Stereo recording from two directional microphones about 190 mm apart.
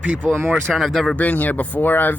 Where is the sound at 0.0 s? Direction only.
5° right (ahead or behind).